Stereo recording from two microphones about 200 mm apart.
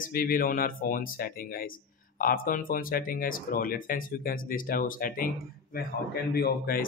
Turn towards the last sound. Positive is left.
turn(degrees=50)  # may be behind; listen again after turning